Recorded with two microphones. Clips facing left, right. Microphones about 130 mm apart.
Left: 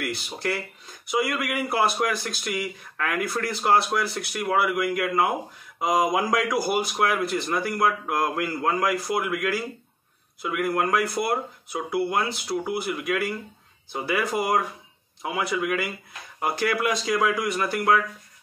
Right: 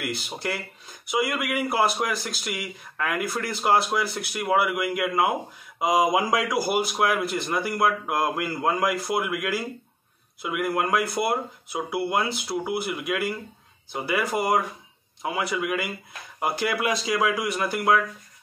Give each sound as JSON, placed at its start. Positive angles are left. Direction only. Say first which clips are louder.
{"t": 0.0, "sound": "speech", "louder": "left 1 dB", "side_deg": -5}